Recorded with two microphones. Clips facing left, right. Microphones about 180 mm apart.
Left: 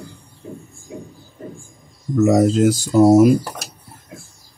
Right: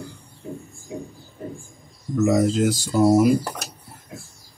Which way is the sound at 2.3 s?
40° left (ahead or behind).